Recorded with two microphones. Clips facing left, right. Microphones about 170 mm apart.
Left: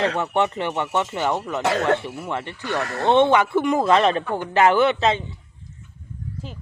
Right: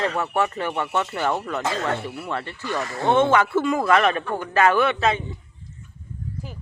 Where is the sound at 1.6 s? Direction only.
70° left (ahead or behind).